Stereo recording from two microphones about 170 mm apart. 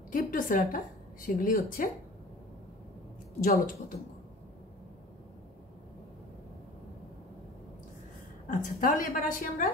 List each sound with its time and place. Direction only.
0.1 s a woman's voice: 55° left (ahead or behind)
3.4 s a woman's voice: 60° left (ahead or behind)
8.5 s a woman's voice: 50° left (ahead or behind)